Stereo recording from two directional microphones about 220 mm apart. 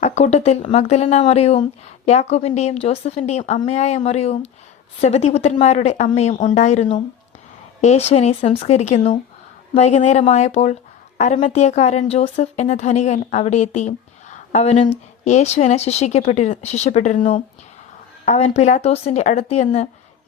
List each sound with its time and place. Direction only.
0.0 s a woman's voice: 30° left (ahead or behind)